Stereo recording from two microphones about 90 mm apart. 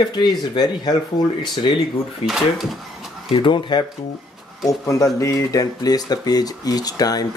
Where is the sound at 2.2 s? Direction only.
90° left.